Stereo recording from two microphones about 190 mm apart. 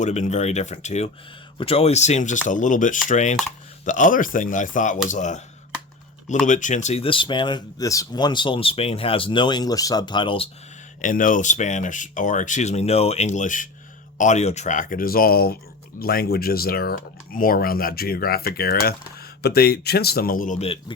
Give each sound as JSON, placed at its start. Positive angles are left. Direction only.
{"t": 0.0, "sound": "speech", "side_deg": 35}
{"t": 6.4, "sound": "speech", "side_deg": 40}
{"t": 11.0, "sound": "speech", "side_deg": 45}